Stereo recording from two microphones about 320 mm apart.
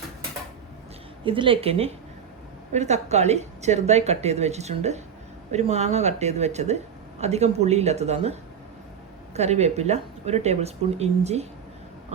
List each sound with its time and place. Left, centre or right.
1.2 s a woman's voice: centre